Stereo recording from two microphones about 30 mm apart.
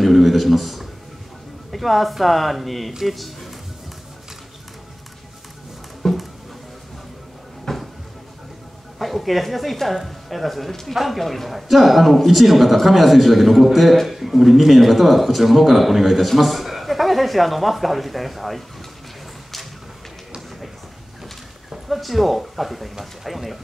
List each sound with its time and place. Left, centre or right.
0.0 s a sound: centre
1.7 s a man's voice: centre
6.0 s music: centre
7.7 s a sound: centre
8.9 s a man's voice: centre
21.8 s a man's voice: centre